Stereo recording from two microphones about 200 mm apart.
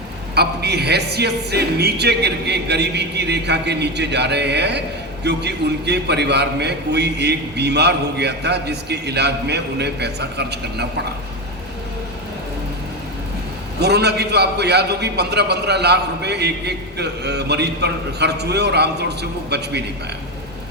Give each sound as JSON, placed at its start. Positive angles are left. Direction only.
{"t": 0.3, "sound": "a man's voice", "side_deg": -55}
{"t": 13.7, "sound": "a man's voice", "side_deg": -55}